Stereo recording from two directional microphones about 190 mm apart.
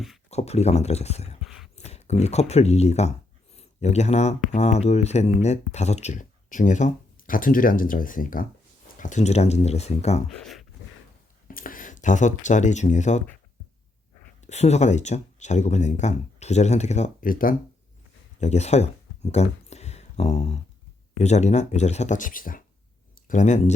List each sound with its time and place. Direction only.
0.3 s speech: 35° left (ahead or behind)
1.4 s a sound: 5° right (ahead or behind)
1.7 s speech: 35° left (ahead or behind)
10.2 s speech: centre (ahead or behind)
11.4 s speech: 45° left (ahead or behind)
14.4 s speech: 35° left (ahead or behind)
18.3 s a sound: 35° left (ahead or behind)
21.2 s speech: 35° left (ahead or behind)